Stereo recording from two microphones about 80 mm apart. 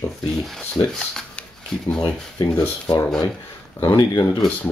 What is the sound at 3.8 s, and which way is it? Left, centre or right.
Speech, left.